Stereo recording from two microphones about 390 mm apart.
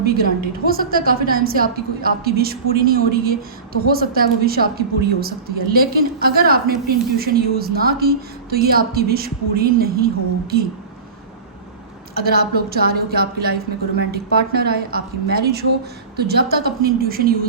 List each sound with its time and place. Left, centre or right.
0.0 s a woman's voice: right
12.2 s a woman's voice: right